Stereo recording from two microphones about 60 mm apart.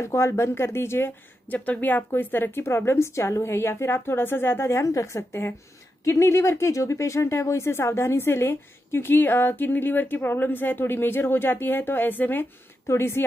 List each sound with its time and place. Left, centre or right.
0.0 s a woman's voice: left
1.5 s a woman's voice: left
6.7 s a woman's voice: left
12.8 s a woman's voice: left